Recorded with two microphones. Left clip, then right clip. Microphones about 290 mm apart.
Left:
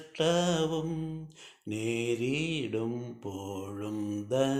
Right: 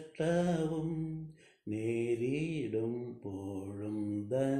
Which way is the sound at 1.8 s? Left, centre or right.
Left.